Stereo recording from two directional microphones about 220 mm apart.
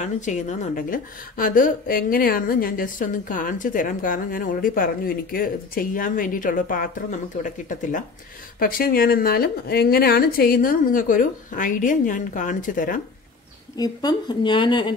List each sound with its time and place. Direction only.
0.0 s a woman's voice: 35° left (ahead or behind)
13.7 s speech: 20° left (ahead or behind)